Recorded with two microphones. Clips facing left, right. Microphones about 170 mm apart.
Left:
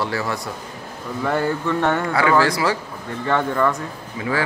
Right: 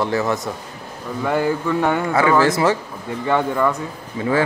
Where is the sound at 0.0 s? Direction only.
20° right (ahead or behind).